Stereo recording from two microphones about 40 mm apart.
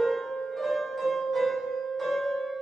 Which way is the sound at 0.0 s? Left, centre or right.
Centre.